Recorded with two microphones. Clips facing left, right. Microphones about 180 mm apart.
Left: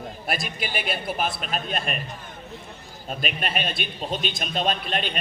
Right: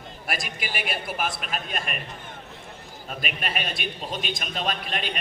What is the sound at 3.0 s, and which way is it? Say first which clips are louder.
Speech: left 4 dB; 35° left (ahead or behind).